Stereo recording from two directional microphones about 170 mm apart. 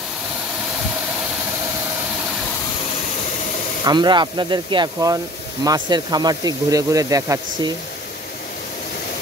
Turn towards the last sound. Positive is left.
turn(degrees=-20)  # may be behind; listen again after turning